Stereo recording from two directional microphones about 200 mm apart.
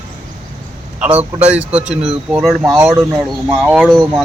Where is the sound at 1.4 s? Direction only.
5° right (ahead or behind).